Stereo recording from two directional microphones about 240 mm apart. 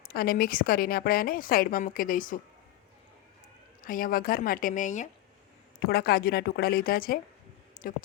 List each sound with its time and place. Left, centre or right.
0.1 s a woman's voice: left
3.8 s a woman's voice: left